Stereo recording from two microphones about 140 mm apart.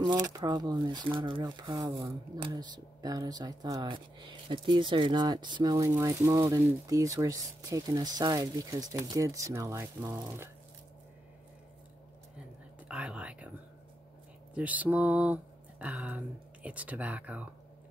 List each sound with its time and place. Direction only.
0.0 s speech: 30° right (ahead or behind)
3.8 s speech: 35° right (ahead or behind); by 10.5 s 20° right (ahead or behind)
12.8 s speech: 10° right (ahead or behind)
14.5 s speech: 10° right (ahead or behind)